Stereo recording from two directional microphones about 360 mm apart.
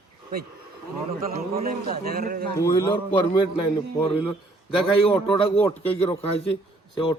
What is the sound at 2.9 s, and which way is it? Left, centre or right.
A man's voice, centre.